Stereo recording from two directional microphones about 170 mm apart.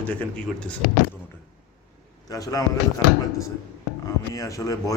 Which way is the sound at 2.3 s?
20° left (ahead or behind).